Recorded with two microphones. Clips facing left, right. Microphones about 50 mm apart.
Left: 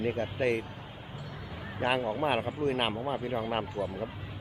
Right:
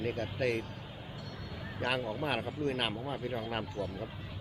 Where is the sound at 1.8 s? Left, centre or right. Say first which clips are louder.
Left 5 dB; left.